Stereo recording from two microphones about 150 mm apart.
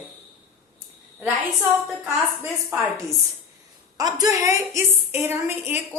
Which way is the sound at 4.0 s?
25° right (ahead or behind).